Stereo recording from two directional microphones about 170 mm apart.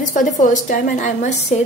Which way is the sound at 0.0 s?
50° left (ahead or behind).